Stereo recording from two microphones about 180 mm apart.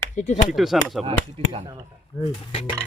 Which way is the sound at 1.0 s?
30° right (ahead or behind).